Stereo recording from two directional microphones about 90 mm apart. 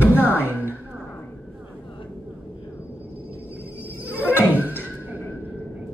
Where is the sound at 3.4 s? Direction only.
20° right (ahead or behind).